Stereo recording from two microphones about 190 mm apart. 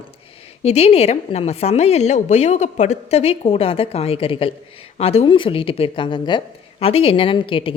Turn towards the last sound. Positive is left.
turn(degrees=25)  # may be behind; listen again after turning